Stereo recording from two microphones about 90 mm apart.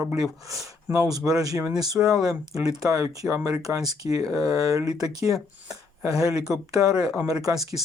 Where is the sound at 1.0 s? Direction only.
45° right (ahead or behind).